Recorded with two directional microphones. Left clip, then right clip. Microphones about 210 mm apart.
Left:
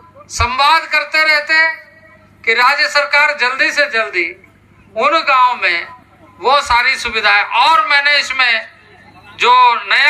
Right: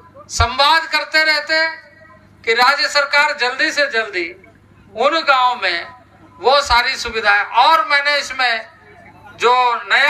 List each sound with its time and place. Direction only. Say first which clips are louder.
0.3 s a man's voice: left 2 dB; 55° right (ahead or behind)